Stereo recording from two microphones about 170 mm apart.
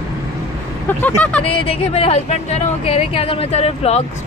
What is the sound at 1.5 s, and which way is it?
Speech, 35° left (ahead or behind).